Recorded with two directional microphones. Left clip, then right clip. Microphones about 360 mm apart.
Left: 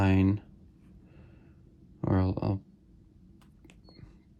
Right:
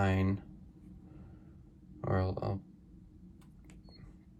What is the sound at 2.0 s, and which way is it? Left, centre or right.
Speech, centre.